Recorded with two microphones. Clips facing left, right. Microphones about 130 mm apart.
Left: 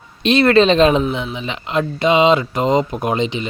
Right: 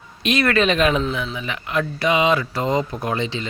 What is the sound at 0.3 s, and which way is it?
Speech, 30° left (ahead or behind).